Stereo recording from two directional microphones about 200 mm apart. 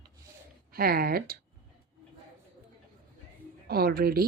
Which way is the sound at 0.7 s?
50° right (ahead or behind).